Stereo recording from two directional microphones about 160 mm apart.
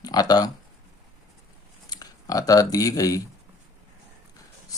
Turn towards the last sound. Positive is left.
turn(degrees=20)  # may be behind; listen again after turning